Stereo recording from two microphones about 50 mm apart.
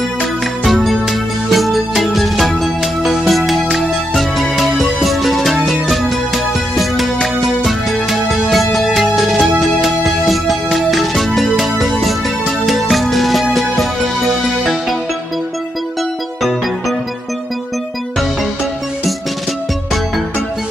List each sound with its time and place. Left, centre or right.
0.7 s music: centre